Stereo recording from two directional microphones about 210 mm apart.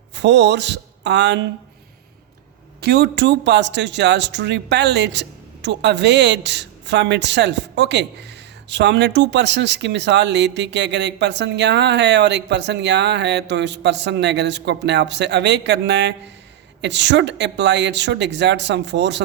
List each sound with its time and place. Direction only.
0.1 s speech: 55° right (ahead or behind)
2.8 s speech: 50° right (ahead or behind)